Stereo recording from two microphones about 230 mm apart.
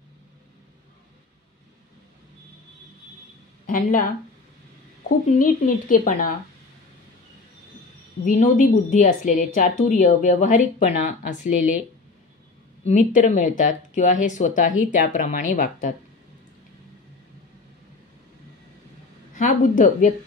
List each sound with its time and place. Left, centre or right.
3.6 s a woman's voice: left
5.4 s a woman's voice: left
8.3 s a woman's voice: left
12.8 s a woman's voice: left
19.3 s a woman's voice: left